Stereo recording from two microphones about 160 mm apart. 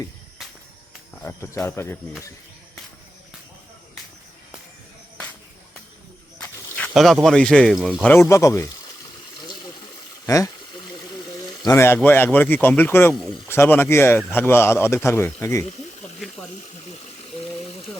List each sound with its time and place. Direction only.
1.2 s a man's voice: 15° left (ahead or behind)
6.4 s speech: 5° left (ahead or behind)
10.2 s speech: 20° left (ahead or behind)
11.6 s a man's voice: 15° left (ahead or behind)
16.2 s a sound: centre (ahead or behind)